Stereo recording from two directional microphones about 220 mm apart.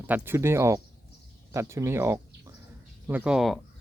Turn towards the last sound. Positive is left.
turn(degrees=0)  # may be behind; listen again after turning